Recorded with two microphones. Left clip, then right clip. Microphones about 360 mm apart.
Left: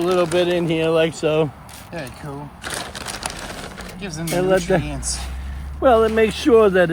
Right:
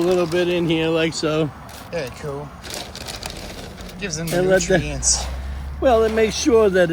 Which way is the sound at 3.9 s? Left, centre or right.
Centre.